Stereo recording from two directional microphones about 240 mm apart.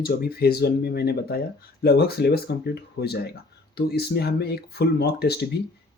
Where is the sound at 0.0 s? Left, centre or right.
Left.